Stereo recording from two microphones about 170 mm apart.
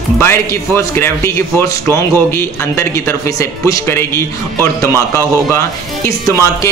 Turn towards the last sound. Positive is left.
turn(degrees=15)  # may be behind; listen again after turning